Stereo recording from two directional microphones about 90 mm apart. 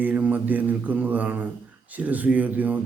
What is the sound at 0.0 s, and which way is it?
Speech, 20° right (ahead or behind).